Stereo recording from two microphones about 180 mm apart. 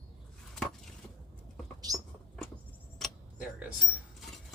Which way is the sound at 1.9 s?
20° right (ahead or behind).